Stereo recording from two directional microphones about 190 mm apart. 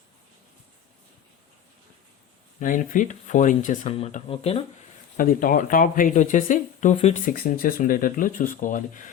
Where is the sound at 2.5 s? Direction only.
45° left (ahead or behind).